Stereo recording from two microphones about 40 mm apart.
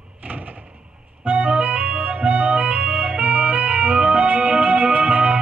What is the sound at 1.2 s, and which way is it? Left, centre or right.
Organ, right.